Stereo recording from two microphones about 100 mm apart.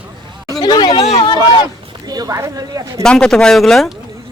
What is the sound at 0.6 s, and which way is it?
Speech, 45° left (ahead or behind).